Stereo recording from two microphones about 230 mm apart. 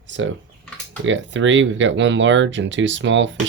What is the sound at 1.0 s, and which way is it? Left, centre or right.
Speech, right.